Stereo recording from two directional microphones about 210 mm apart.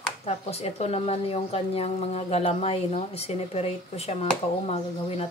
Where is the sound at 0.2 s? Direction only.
30° left (ahead or behind).